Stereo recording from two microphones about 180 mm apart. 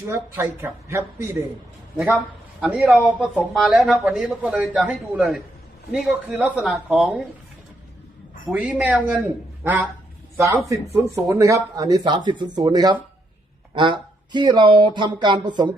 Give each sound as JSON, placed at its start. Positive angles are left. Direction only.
{"t": 0.1, "sound": "a woman's voice", "side_deg": -15}
{"t": 2.0, "sound": "speech", "side_deg": -5}
{"t": 6.4, "sound": "speech", "side_deg": -5}
{"t": 8.4, "sound": "a woman's voice", "side_deg": -5}